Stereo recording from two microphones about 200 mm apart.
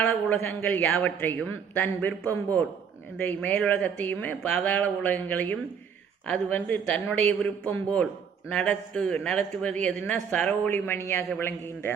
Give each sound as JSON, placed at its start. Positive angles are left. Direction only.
{"t": 0.0, "sound": "a man's voice", "side_deg": 5}